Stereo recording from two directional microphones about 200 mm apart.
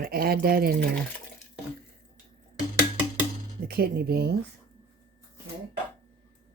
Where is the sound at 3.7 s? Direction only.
50° right (ahead or behind).